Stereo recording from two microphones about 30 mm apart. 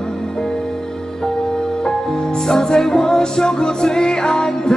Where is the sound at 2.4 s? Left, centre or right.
Centre.